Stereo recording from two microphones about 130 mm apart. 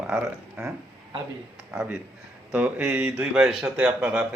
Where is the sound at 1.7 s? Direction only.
15° right (ahead or behind).